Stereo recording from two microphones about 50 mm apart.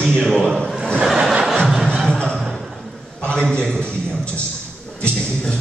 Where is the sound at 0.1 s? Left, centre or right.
Centre.